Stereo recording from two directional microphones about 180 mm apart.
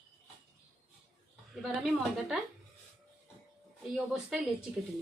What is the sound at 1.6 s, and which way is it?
Speech, centre (ahead or behind).